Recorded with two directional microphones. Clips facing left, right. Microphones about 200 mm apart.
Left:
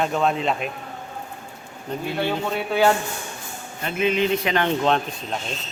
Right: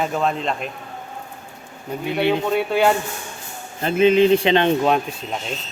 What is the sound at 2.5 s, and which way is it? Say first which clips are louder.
Speech: left 2 dB; centre (ahead or behind).